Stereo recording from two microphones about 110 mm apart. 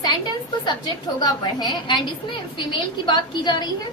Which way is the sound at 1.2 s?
40° left (ahead or behind).